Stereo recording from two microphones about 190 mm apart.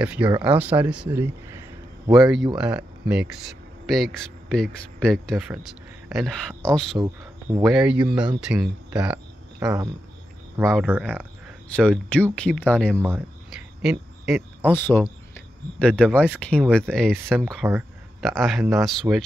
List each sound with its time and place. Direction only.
0.0 s speech: 5° right (ahead or behind)
2.1 s speech: centre (ahead or behind)
9.6 s speech: 15° right (ahead or behind)
10.6 s speech: centre (ahead or behind)
11.7 s speech: 5° left (ahead or behind)
13.0 s a sound: 5° right (ahead or behind)
14.7 s speech: 10° left (ahead or behind)